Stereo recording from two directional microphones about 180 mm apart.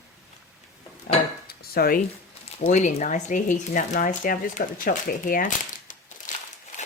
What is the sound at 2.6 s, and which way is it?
Speech, 40° left (ahead or behind).